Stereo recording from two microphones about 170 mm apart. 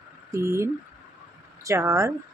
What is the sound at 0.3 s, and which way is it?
A woman's voice, 15° right (ahead or behind).